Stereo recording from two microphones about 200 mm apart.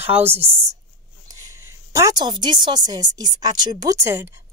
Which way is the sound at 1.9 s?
20° right (ahead or behind).